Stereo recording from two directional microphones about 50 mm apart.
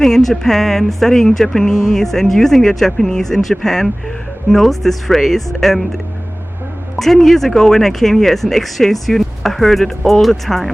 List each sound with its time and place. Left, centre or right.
0.0 s speech: centre
7.0 s speech: centre